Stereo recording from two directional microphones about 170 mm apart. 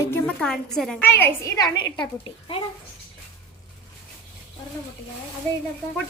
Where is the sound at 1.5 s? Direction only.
25° left (ahead or behind).